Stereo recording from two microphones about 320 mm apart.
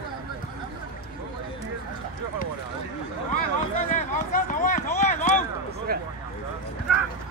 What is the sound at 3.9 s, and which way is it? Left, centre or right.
Run, left.